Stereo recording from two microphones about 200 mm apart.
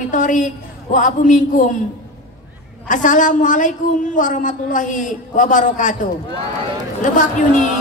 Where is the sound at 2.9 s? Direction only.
40° left (ahead or behind).